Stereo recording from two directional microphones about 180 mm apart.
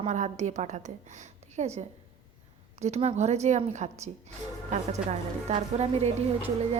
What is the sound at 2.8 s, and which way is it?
A woman's voice, 35° right (ahead or behind).